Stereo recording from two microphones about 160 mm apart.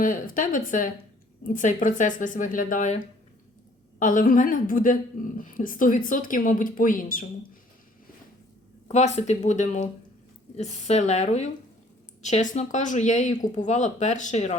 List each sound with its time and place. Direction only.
0.0 s a woman's voice: 55° left (ahead or behind)
4.0 s a woman's voice: 55° left (ahead or behind)
8.9 s speech: 45° left (ahead or behind)